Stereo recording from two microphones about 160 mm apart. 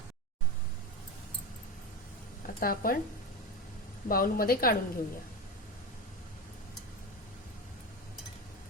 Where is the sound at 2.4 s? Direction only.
65° left (ahead or behind).